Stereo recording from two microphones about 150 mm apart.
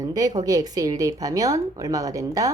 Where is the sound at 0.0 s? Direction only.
25° right (ahead or behind).